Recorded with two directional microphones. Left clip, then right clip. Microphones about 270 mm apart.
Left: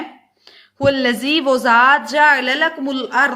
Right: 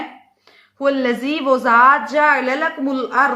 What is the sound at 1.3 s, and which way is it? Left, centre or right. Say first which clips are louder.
A woman's voice: even; left.